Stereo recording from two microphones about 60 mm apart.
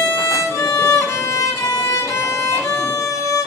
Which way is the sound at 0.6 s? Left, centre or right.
Left.